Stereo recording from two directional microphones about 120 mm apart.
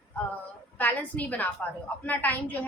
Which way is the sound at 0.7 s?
15° left (ahead or behind).